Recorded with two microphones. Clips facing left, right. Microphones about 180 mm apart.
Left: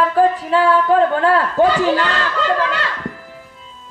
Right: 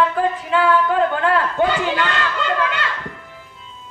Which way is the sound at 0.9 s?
35° left (ahead or behind).